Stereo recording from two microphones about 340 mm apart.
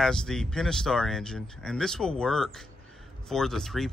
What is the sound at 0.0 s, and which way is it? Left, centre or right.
Speech, centre.